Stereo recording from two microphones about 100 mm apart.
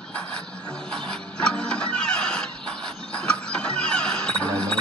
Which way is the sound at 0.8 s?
10° left (ahead or behind).